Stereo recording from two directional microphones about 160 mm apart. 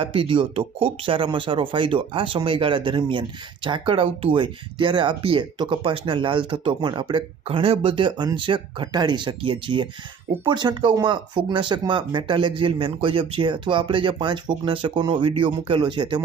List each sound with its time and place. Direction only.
0.0 s speech: 35° right (ahead or behind)